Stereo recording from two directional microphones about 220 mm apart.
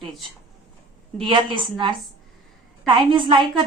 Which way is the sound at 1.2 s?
20° right (ahead or behind).